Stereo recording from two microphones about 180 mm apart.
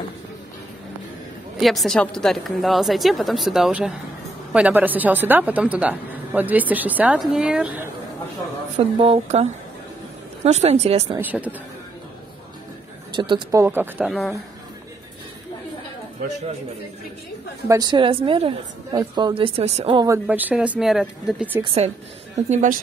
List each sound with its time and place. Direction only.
1.6 s a woman's voice: centre (ahead or behind)
8.7 s speech: 35° right (ahead or behind)
11.1 s a woman's voice: 10° right (ahead or behind)
13.1 s a woman's voice: 25° right (ahead or behind); by 14.1 s 10° right (ahead or behind)
17.6 s a woman's voice: 20° right (ahead or behind)
20.2 s a woman's voice: 10° right (ahead or behind)
22.5 s a woman's voice: 45° right (ahead or behind)